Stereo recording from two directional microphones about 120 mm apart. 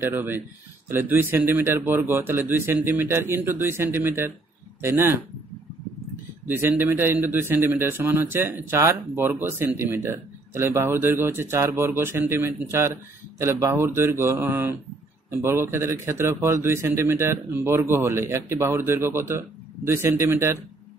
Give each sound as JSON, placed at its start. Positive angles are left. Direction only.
{"t": 0.0, "sound": "a man's voice", "side_deg": -20}
{"t": 6.4, "sound": "a man's voice", "side_deg": -20}